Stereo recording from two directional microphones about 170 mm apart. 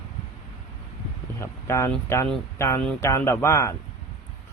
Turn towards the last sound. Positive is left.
turn(degrees=15)  # may be behind; listen again after turning